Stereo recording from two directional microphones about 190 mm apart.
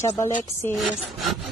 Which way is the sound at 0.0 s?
10° left (ahead or behind).